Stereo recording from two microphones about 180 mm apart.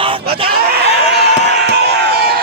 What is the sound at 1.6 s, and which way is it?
Crowd, 65° right (ahead or behind).